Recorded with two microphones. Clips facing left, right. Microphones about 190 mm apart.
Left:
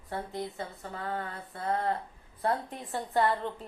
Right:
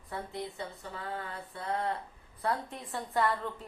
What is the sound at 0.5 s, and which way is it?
A woman's voice, 45° left (ahead or behind).